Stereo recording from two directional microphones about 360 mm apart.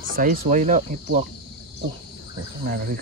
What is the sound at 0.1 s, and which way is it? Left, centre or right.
Speech, right.